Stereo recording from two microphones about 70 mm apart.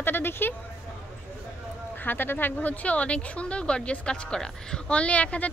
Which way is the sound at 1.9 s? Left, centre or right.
Left.